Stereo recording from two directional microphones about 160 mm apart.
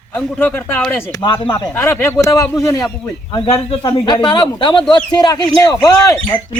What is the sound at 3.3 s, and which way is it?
Speech, 35° left (ahead or behind).